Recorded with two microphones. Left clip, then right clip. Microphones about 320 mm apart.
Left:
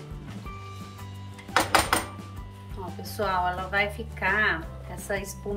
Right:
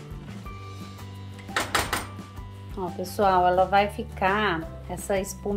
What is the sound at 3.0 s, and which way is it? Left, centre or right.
A woman's voice, right.